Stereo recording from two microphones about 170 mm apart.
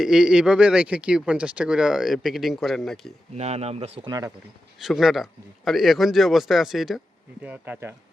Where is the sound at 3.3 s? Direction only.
40° right (ahead or behind).